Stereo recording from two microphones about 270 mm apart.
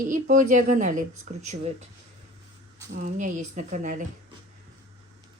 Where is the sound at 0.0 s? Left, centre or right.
Right.